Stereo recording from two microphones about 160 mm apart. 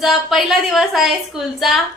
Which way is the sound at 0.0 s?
Centre (ahead or behind).